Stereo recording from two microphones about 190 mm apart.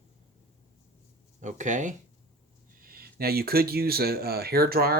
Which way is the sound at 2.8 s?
50° right (ahead or behind).